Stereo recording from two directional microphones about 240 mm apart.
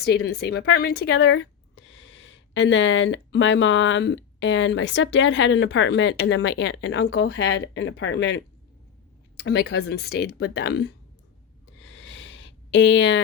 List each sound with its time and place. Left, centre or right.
0.3 s speech: left
9.4 s speech: left
11.8 s a sound: left